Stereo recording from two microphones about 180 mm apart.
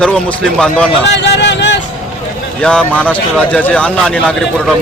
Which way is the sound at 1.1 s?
70° left (ahead or behind).